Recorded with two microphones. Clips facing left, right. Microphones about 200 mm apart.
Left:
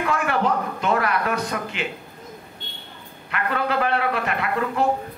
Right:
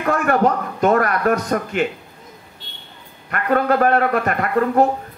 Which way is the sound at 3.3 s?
45° right (ahead or behind).